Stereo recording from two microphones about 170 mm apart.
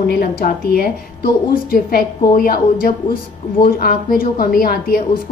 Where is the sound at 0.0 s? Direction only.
60° left (ahead or behind).